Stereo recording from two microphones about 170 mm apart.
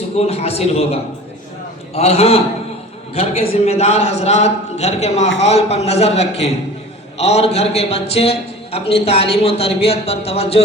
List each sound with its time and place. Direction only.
0.2 s a man's voice: 35° left (ahead or behind)